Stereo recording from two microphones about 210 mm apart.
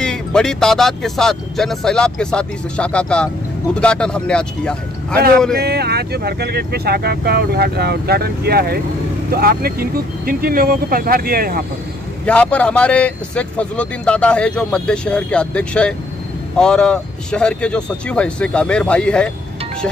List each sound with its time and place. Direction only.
0.0 s speech: 5° left (ahead or behind)
5.6 s speech: 50° right (ahead or behind)
12.3 s speech: 5° left (ahead or behind)